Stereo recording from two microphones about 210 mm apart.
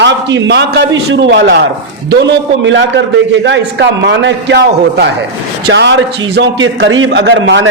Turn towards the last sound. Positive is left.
turn(degrees=-65)  # may be behind; listen again after turning